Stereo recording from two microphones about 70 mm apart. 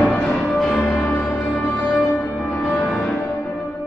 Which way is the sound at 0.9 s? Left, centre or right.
Left.